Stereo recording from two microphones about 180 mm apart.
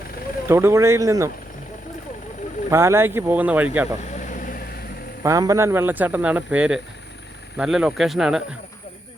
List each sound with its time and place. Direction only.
0.4 s speech: 15° right (ahead or behind)
2.6 s speech: 15° right (ahead or behind)
4.1 s vehicle: 45° left (ahead or behind)
5.2 s speech: 20° right (ahead or behind); by 8.4 s centre (ahead or behind)